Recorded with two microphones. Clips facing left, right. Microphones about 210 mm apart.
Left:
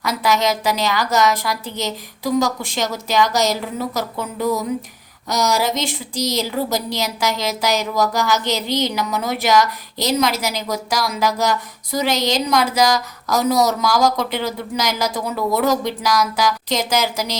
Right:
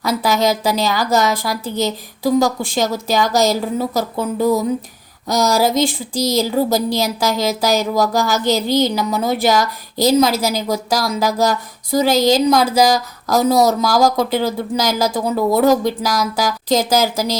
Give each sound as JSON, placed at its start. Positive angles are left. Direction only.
{"t": 0.0, "sound": "a woman's voice", "side_deg": -30}